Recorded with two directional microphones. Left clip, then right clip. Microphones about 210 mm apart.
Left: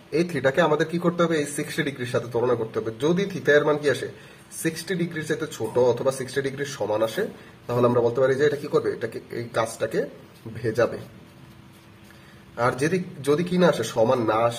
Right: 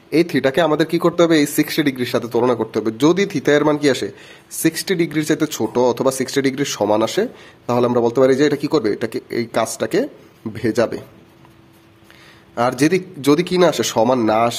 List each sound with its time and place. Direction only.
0.1 s speech: 45° right (ahead or behind)
12.5 s speech: 55° right (ahead or behind)